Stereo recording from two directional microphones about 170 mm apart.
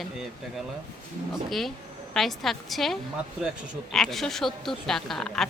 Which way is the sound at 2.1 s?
Centre (ahead or behind).